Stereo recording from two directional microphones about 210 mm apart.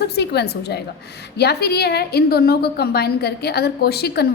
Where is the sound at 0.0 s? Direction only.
50° left (ahead or behind).